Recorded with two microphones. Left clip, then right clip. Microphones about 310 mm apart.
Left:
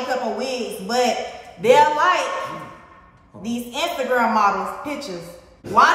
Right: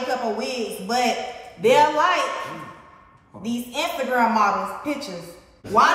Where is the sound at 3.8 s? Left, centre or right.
Centre.